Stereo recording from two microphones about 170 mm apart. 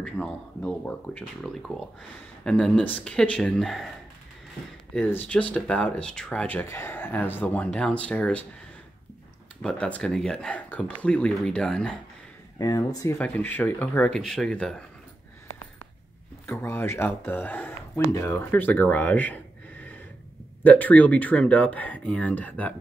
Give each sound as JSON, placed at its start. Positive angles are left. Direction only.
{"t": 0.0, "sound": "speech", "side_deg": 5}
{"t": 4.9, "sound": "speech", "side_deg": 10}
{"t": 9.6, "sound": "speech", "side_deg": 5}
{"t": 12.5, "sound": "speech", "side_deg": 20}
{"t": 16.4, "sound": "speech", "side_deg": 15}